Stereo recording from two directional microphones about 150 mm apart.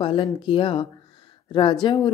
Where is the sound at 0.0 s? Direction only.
35° left (ahead or behind).